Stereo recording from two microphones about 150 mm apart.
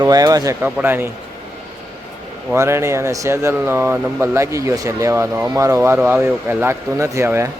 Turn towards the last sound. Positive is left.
turn(degrees=-15)  # may be behind; listen again after turning